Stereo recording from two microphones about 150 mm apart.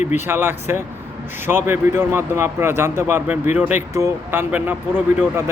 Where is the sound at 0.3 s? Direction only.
15° right (ahead or behind).